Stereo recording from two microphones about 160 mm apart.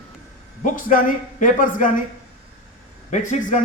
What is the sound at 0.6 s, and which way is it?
A man's voice, 55° left (ahead or behind).